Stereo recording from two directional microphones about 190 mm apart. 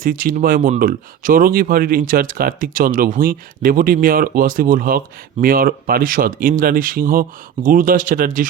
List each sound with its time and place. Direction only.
0.0 s speech: 45° right (ahead or behind)